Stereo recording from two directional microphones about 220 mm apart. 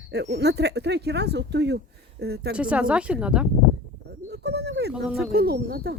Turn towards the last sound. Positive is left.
turn(degrees=-45)  # may be behind; listen again after turning